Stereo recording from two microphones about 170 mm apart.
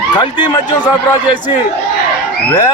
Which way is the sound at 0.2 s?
25° left (ahead or behind).